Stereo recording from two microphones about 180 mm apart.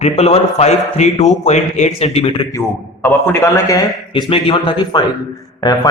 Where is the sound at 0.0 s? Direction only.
35° left (ahead or behind).